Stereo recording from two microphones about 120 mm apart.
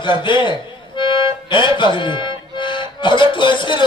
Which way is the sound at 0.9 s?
45° left (ahead or behind).